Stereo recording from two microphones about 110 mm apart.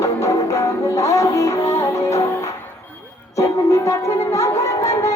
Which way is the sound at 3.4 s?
30° left (ahead or behind).